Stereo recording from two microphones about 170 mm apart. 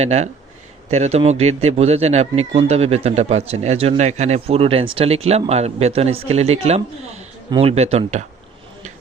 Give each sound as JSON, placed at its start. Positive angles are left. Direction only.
{"t": 0.0, "sound": "a man's voice", "side_deg": -40}